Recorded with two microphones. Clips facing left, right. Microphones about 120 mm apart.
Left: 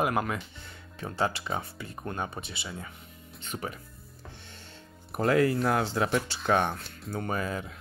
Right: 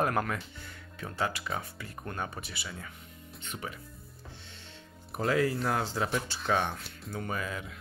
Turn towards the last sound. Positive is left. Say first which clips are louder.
# left 4 dB
turn(degrees=35)  # may be behind; listen again after turning